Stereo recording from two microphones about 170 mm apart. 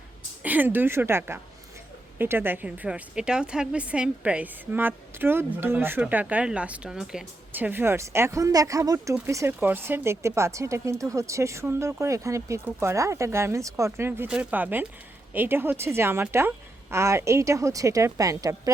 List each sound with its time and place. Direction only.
0.4 s a woman's voice: 10° right (ahead or behind)